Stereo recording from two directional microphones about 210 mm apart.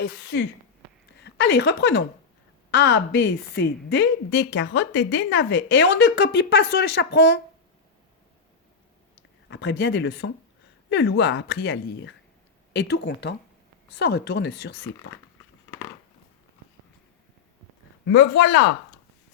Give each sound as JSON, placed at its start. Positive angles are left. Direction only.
{"t": 0.0, "sound": "a woman's voice", "side_deg": 50}
{"t": 9.5, "sound": "a woman's voice", "side_deg": 55}
{"t": 18.1, "sound": "a woman's voice", "side_deg": 60}